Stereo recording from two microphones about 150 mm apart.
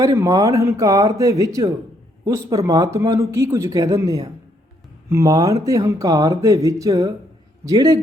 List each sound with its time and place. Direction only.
0.0 s a man's voice: 20° right (ahead or behind)